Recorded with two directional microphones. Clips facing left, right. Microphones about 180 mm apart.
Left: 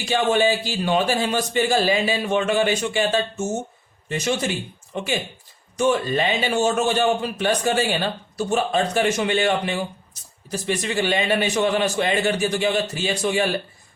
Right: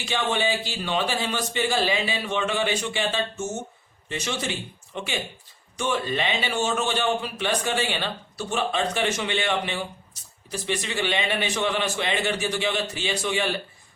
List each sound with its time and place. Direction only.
0.0 s a man's voice: 40° left (ahead or behind)